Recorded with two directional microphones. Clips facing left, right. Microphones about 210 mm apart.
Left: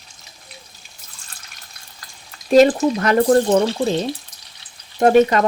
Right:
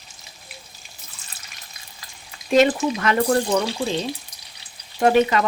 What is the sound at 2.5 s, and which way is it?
A woman's voice, 35° left (ahead or behind).